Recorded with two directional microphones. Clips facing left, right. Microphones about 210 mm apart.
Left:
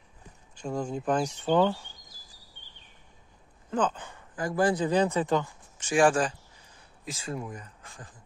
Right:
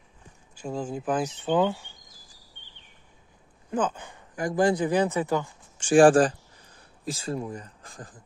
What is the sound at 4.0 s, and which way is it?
Speech, 15° right (ahead or behind).